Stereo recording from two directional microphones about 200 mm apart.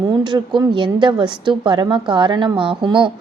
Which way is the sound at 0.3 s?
20° right (ahead or behind).